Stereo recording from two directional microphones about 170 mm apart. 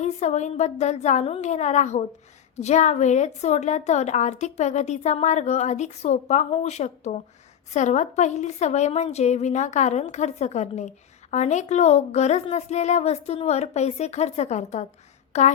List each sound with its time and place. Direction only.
0.0 s a woman's voice: 40° left (ahead or behind)